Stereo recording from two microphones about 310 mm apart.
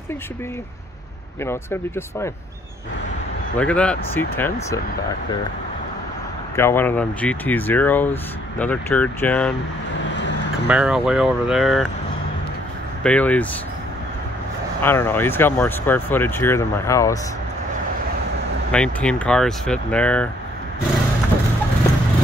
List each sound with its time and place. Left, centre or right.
1.4 s speech: centre
3.5 s speech: centre
6.5 s speech: centre
10.1 s vehicle: left
10.7 s speech: centre
13.0 s speech: centre
14.8 s speech: centre
18.7 s speech: centre